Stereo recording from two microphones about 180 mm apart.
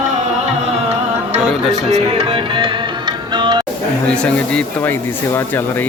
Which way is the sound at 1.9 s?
30° right (ahead or behind).